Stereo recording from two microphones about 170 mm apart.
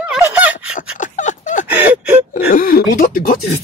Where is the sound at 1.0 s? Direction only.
45° left (ahead or behind).